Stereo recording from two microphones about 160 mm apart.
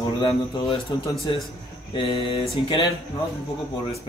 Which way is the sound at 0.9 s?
25° left (ahead or behind).